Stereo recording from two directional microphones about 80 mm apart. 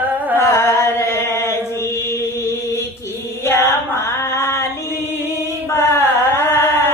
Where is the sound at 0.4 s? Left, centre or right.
Left.